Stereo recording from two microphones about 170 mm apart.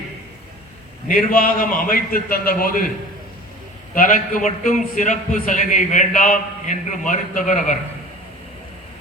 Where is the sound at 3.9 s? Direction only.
50° left (ahead or behind).